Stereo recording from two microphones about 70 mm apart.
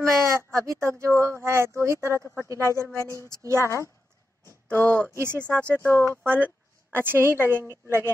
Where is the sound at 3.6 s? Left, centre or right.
Left.